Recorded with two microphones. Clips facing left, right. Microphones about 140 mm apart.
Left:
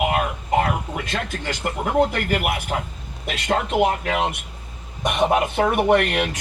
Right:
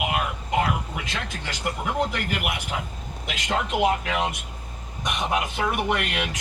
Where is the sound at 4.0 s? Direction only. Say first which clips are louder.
Left 4 dB; 45° left (ahead or behind).